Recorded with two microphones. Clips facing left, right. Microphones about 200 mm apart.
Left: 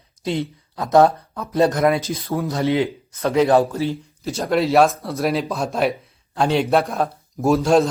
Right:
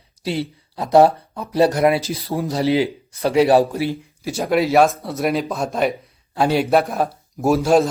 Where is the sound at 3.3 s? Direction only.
10° right (ahead or behind).